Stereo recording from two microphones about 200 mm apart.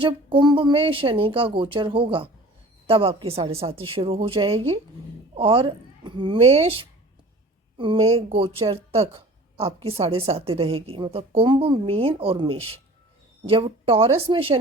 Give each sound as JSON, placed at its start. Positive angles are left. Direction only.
{"t": 0.0, "sound": "a woman's voice", "side_deg": -25}